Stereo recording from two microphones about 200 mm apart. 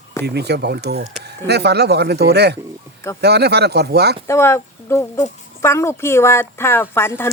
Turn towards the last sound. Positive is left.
turn(degrees=10)  # may be behind; listen again after turning